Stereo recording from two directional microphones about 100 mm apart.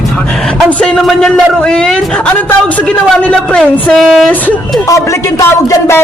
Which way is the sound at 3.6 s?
5° left (ahead or behind).